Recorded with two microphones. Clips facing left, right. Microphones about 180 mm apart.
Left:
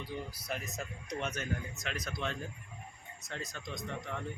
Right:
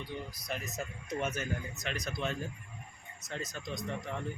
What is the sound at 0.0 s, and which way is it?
A man's voice, 5° left (ahead or behind).